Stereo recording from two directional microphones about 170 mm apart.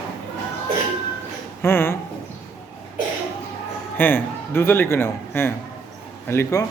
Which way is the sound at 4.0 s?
10° left (ahead or behind).